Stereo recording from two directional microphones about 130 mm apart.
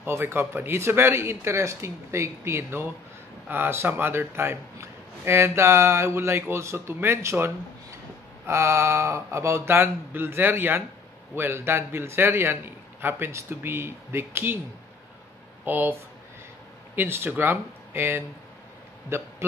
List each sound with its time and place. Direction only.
0.0 s a man's voice: 15° right (ahead or behind)
15.6 s a man's voice: 15° right (ahead or behind)